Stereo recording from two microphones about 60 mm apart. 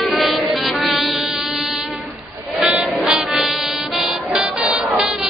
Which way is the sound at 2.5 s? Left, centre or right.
Centre.